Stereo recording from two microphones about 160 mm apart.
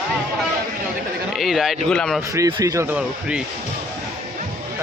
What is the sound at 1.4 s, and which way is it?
Speech, centre (ahead or behind).